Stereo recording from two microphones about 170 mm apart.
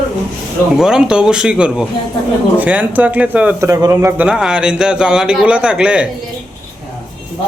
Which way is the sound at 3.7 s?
20° right (ahead or behind).